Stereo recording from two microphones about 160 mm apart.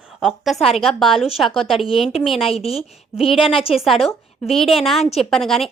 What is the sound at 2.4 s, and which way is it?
A woman's voice, 40° left (ahead or behind).